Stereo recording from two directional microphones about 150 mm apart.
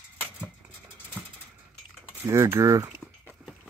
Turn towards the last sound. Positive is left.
turn(degrees=-20)  # may be behind; listen again after turning